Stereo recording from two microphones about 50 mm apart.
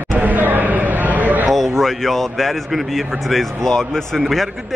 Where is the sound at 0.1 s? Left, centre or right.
Right.